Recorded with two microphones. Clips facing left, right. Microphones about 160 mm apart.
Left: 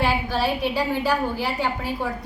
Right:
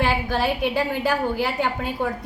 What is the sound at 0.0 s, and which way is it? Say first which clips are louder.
A woman's voice: right 1 dB; 55° right (ahead or behind).